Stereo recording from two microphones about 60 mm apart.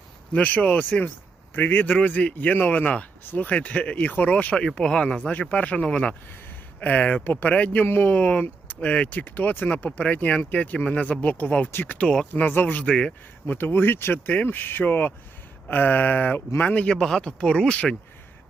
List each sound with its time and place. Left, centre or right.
0.3 s speech: left
4.6 s speech: centre
7.9 s speech: left
8.1 s speech: left
12.8 s speech: centre
13.5 s speech: left
17.0 s speech: centre